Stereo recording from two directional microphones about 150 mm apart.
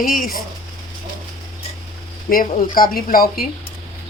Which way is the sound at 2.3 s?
70° left (ahead or behind).